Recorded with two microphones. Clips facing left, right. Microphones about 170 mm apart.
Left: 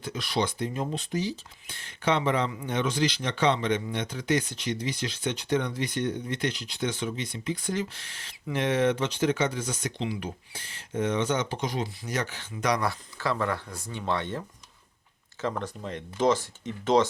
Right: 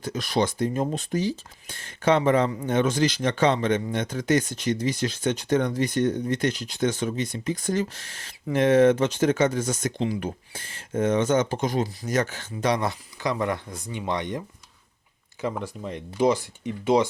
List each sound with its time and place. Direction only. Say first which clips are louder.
0.0 s speech: right 4 dB; 45° right (ahead or behind)
12.5 s speech: right 3 dB; 25° right (ahead or behind); by 17.1 s 10° right (ahead or behind)